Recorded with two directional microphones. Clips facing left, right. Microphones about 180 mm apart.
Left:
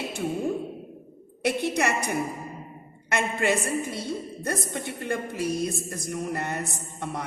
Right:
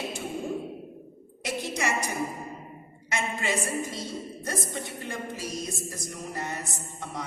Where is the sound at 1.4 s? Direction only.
60° left (ahead or behind).